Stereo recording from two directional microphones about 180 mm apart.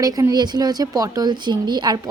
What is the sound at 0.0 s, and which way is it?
A woman's voice, 20° right (ahead or behind).